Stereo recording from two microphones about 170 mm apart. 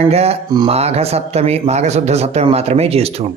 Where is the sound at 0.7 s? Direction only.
40° right (ahead or behind).